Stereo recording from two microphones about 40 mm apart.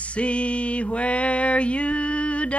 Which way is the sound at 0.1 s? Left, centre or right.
Left.